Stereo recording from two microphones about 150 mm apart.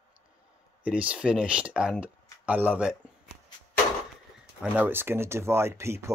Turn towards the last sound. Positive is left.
turn(degrees=-20)  # may be behind; listen again after turning